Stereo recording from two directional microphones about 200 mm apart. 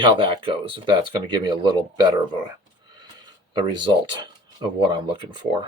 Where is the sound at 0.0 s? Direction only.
25° right (ahead or behind).